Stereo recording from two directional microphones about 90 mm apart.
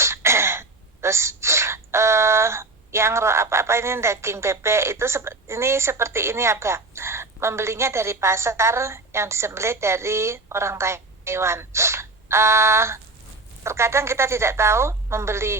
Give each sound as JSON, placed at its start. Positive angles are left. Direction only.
{"t": 0.0, "sound": "speech", "side_deg": -30}